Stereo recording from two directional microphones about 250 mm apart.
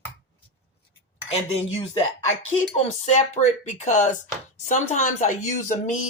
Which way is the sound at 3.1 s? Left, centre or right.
Left.